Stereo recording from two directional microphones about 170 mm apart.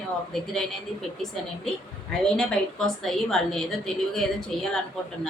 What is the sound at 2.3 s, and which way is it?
A woman's voice, centre (ahead or behind).